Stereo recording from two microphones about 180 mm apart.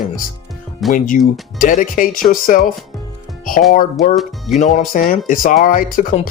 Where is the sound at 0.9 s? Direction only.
50° left (ahead or behind).